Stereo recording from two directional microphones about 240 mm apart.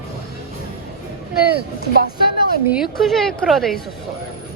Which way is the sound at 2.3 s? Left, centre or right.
Left.